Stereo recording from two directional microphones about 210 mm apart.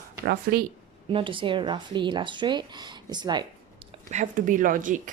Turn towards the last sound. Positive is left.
turn(degrees=-40)  # may be behind; listen again after turning